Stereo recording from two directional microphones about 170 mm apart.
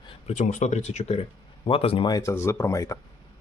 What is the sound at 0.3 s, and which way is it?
Speech, 45° left (ahead or behind).